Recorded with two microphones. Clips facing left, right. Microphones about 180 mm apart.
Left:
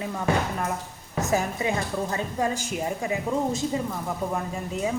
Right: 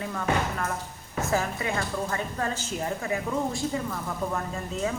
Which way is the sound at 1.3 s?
20° left (ahead or behind).